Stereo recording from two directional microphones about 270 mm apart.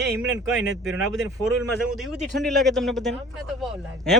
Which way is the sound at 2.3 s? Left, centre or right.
Centre.